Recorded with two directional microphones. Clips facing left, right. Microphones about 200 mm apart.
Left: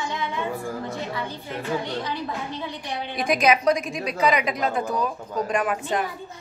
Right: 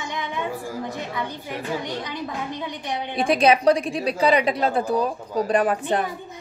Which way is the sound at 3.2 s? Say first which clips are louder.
Right 3 dB; 30° right (ahead or behind).